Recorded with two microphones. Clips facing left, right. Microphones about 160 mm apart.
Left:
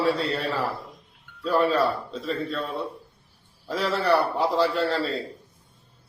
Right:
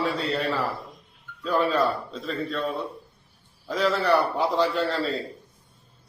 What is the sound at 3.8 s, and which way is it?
Speech, 30° left (ahead or behind).